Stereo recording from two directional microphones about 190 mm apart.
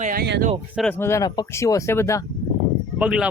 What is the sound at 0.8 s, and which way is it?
Speech, 10° left (ahead or behind).